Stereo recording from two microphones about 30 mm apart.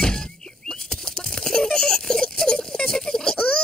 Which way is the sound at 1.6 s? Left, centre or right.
Left.